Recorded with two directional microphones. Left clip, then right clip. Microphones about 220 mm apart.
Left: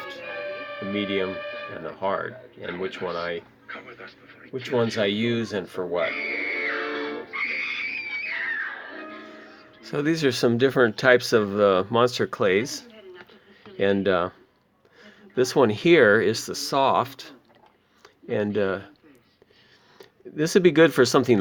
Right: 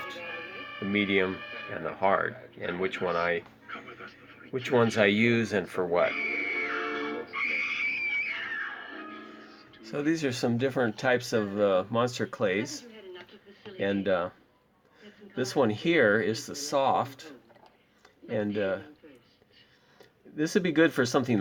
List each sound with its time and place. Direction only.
0.3 s music: 30° right (ahead or behind)
1.1 s speech: 5° left (ahead or behind)
1.4 s music: 30° right (ahead or behind)
1.7 s speech: 5° left (ahead or behind)
3.7 s a sound: 30° right (ahead or behind)
4.6 s speech: centre (ahead or behind)
6.0 s music: 30° right (ahead or behind)
9.8 s speech: 45° left (ahead or behind)
20.0 s speech: 40° left (ahead or behind)